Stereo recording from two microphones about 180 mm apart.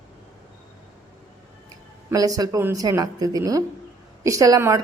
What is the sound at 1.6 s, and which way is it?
Speech, 20° right (ahead or behind).